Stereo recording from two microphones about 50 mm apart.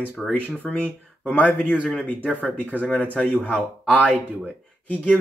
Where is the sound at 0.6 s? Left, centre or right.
Left.